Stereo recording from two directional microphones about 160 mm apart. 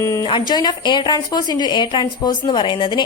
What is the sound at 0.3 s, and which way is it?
A woman's voice, 30° left (ahead or behind).